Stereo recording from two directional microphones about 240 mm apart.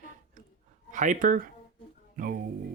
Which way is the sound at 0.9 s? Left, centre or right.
Right.